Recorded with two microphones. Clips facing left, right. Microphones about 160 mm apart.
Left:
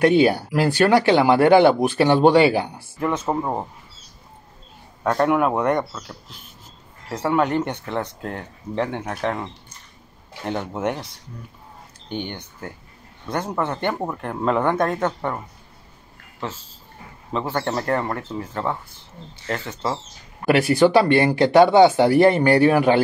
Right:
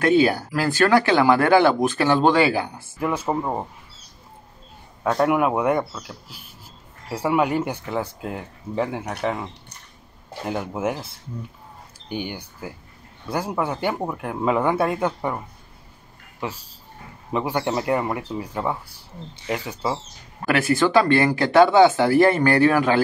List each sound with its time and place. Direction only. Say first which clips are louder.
0.0 s speech: left 2 dB; 20° left (ahead or behind)
3.0 s speech: left 1 dB; 10° right (ahead or behind)
5.0 s speech: left 1 dB; 5° right (ahead or behind)
12.1 s speech: even; 10° right (ahead or behind)
20.4 s speech: left 4 dB; 20° left (ahead or behind)